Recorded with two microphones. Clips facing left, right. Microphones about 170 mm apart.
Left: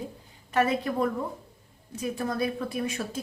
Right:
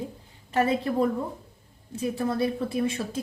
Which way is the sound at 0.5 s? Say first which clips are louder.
Right 1 dB; 35° right (ahead or behind).